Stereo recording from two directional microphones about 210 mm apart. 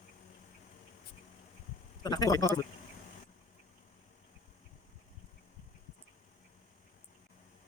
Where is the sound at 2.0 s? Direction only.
20° left (ahead or behind).